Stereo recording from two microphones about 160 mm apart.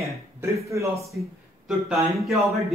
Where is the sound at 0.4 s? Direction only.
20° right (ahead or behind).